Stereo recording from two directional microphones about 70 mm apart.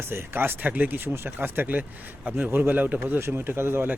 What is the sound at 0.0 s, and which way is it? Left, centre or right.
Speech, right.